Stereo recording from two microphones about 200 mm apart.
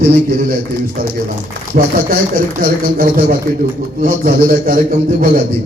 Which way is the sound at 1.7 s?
40° right (ahead or behind).